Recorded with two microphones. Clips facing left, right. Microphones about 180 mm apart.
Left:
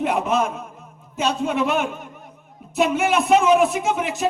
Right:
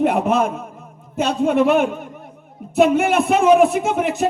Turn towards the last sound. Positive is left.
turn(degrees=-55)  # may be behind; listen again after turning